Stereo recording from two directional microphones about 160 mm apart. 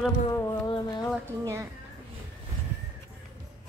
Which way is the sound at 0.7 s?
25° left (ahead or behind).